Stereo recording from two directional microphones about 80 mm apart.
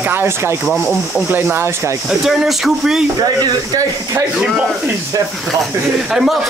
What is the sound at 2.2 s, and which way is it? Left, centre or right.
Speech, centre.